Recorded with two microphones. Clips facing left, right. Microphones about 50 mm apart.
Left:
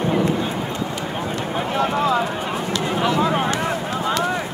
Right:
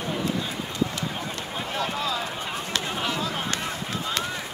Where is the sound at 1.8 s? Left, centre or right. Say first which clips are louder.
Left 9 dB; left.